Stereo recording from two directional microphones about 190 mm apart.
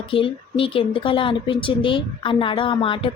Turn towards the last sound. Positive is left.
turn(degrees=25)  # may be behind; listen again after turning